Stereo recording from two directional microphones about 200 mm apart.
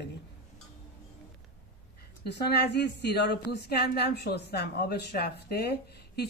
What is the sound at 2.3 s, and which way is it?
A woman's voice, 55° left (ahead or behind).